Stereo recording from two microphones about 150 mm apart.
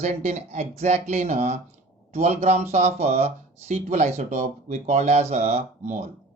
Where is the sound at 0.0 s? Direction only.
50° right (ahead or behind).